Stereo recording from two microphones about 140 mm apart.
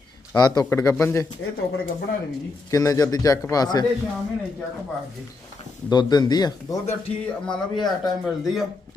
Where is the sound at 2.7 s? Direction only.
25° left (ahead or behind).